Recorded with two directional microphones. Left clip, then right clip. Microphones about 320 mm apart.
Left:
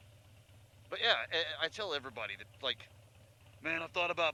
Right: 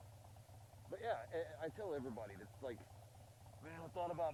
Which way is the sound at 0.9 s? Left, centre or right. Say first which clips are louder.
Left 12 dB; left.